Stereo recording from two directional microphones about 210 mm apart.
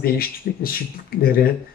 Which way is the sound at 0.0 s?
45° left (ahead or behind).